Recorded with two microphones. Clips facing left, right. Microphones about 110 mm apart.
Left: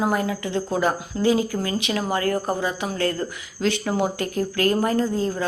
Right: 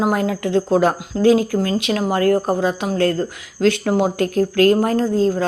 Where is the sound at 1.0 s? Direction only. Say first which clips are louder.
Right 6 dB; 80° right.